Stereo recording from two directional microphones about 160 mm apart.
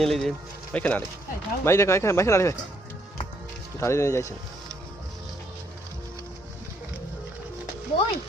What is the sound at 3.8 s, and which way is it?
Speech, 15° left (ahead or behind).